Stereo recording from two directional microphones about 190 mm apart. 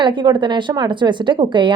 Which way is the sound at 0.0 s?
25° right (ahead or behind).